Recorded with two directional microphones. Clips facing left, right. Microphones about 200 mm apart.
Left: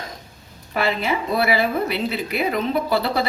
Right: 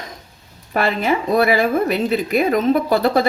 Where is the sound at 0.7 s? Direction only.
45° right (ahead or behind).